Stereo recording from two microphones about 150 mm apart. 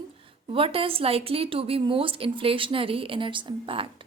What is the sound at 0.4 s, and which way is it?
A woman's voice, 40° right (ahead or behind).